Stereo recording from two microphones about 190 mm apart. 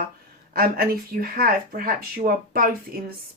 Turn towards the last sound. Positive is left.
turn(degrees=-50)  # may be behind; listen again after turning